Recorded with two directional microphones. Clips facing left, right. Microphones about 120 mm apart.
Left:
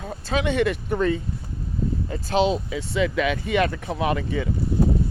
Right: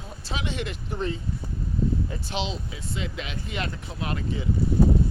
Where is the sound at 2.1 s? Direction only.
50° left (ahead or behind).